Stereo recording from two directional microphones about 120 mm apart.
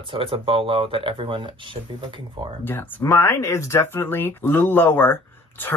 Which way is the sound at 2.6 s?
20° left (ahead or behind).